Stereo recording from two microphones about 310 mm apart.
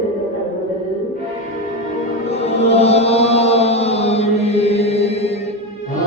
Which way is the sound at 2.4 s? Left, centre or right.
Centre.